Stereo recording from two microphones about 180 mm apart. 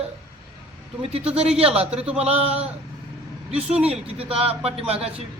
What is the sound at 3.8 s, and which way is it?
Speech, 35° right (ahead or behind).